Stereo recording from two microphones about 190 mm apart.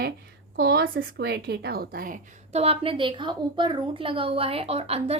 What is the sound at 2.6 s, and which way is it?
A woman's voice, 30° right (ahead or behind).